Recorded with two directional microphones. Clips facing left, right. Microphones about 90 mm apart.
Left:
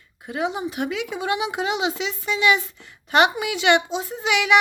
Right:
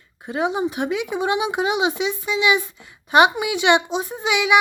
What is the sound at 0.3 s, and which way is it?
A woman's voice, 25° right (ahead or behind).